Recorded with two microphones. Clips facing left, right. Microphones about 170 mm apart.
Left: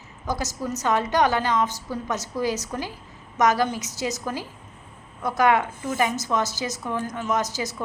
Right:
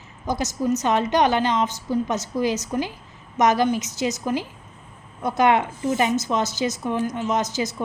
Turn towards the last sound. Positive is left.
turn(degrees=-20)  # may be behind; listen again after turning